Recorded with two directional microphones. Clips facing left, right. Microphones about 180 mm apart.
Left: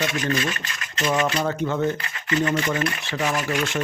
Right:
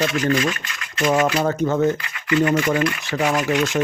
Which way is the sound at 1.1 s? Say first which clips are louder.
Right 4 dB; 35° right (ahead or behind).